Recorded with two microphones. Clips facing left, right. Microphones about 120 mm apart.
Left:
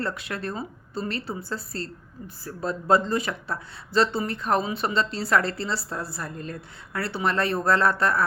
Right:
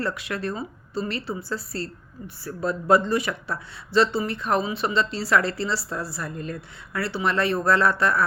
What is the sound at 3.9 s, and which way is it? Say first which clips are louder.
Speech: right 2 dB; 45° left (ahead or behind).